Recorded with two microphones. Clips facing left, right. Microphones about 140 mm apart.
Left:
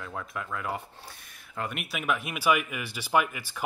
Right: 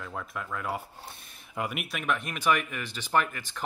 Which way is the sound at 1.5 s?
10° right (ahead or behind).